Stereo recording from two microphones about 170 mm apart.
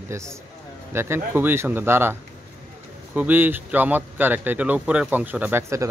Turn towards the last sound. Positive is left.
turn(degrees=-15)  # may be behind; listen again after turning